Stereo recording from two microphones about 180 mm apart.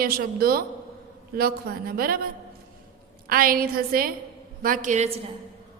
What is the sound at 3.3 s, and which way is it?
A woman's voice, 55° right (ahead or behind).